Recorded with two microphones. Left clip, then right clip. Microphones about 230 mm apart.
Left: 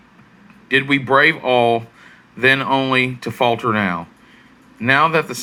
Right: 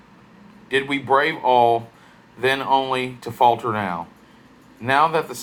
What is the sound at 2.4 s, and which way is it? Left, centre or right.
Speech, left.